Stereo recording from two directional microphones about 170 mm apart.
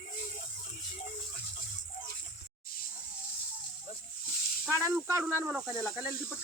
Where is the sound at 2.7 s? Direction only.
60° left (ahead or behind).